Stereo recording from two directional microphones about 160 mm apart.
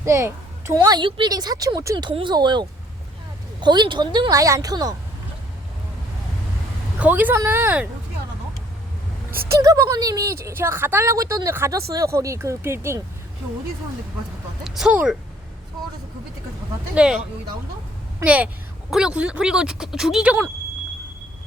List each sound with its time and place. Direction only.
0.0 s a woman's voice: 15° right (ahead or behind)
7.0 s a woman's voice: 10° right (ahead or behind)
9.5 s a woman's voice: 20° right (ahead or behind)
14.6 s speech: 5° right (ahead or behind)
16.9 s speech: 5° right (ahead or behind)